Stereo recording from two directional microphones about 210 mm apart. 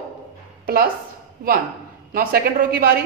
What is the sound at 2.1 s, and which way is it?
Speech, 45° right (ahead or behind).